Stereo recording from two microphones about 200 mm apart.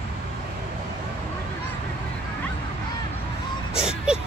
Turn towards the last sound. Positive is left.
turn(degrees=-5)  # may be behind; listen again after turning